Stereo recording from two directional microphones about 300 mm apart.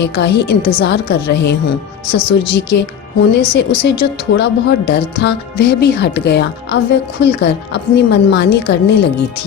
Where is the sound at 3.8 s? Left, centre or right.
Left.